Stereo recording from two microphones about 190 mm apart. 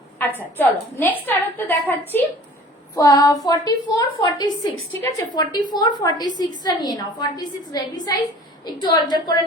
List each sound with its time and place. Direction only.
0.2 s a woman's voice: 10° left (ahead or behind)